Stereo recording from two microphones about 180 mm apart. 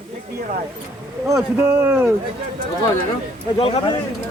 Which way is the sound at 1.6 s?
10° right (ahead or behind).